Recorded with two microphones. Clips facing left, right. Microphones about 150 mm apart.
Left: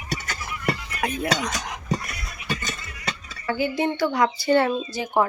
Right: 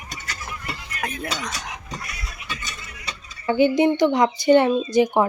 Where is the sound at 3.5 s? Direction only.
25° right (ahead or behind).